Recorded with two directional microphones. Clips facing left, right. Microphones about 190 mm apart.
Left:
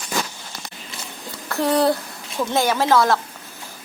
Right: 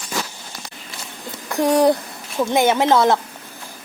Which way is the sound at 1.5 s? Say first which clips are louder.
Right 3 dB; 15° right (ahead or behind).